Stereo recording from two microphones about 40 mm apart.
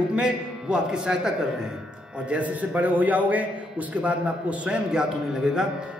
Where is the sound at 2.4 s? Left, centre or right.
Right; by 5.6 s centre.